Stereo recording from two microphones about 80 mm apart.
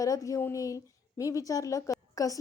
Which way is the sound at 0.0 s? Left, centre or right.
Left.